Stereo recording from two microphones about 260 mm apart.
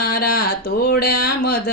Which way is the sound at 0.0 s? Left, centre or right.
Left.